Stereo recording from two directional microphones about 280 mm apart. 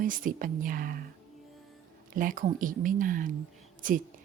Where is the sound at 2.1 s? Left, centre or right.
Right.